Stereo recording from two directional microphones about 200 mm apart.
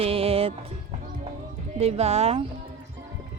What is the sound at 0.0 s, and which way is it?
Music, 30° right (ahead or behind).